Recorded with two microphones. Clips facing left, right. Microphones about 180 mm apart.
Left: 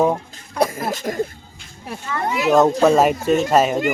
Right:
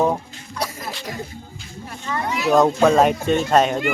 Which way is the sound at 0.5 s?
50° left (ahead or behind).